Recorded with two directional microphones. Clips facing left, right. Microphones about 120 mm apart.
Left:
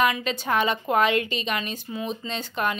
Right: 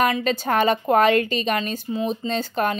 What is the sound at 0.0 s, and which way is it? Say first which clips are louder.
A woman's voice: right 3 dB; 40° right (ahead or behind).